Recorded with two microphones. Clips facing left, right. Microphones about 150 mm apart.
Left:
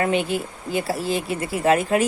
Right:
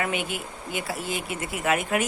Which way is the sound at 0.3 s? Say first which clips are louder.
Left 7 dB; 35° left (ahead or behind).